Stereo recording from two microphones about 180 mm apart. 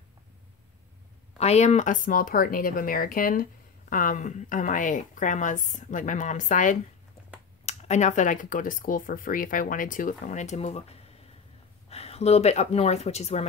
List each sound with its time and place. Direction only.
1.4 s speech: 35° left (ahead or behind)
11.9 s speech: 35° left (ahead or behind)